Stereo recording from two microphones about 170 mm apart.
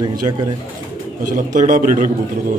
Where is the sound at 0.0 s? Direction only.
25° right (ahead or behind).